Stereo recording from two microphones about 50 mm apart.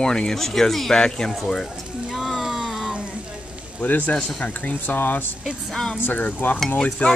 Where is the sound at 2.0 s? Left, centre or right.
Centre.